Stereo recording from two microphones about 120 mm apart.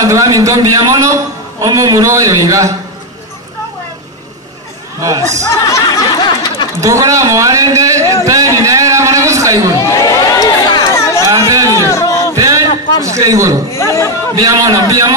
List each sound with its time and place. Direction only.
0.0 s a man's voice: 25° right (ahead or behind)
5.0 s a man's voice: 25° right (ahead or behind)
5.7 s a sound: 30° left (ahead or behind)
6.8 s a man's voice: 25° right (ahead or behind)
8.5 s a sound: 25° right (ahead or behind)
9.8 s crowd: 30° left (ahead or behind)
11.0 s chatter: 25° left (ahead or behind)
11.2 s chatter: 30° right (ahead or behind)
11.9 s a sound: 25° left (ahead or behind)
12.4 s a sound: 30° right (ahead or behind)
13.0 s a man's voice: 25° right (ahead or behind)
13.7 s speech: 25° left (ahead or behind)
14.4 s a man's voice: 25° right (ahead or behind)